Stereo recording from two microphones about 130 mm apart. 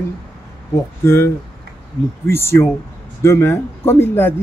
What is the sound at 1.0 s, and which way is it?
Speech, 20° left (ahead or behind).